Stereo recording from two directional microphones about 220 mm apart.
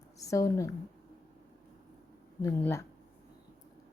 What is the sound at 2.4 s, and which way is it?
Speech, 10° left (ahead or behind).